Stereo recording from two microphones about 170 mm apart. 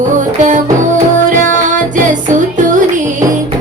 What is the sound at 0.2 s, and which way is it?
Music, 50° right (ahead or behind).